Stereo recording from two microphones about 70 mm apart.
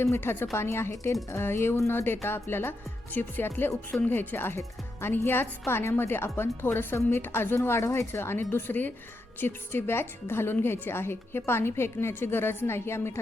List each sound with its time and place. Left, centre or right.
0.0 s speech: left